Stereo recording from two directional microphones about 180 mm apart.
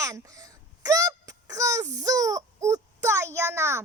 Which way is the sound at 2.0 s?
20° right (ahead or behind).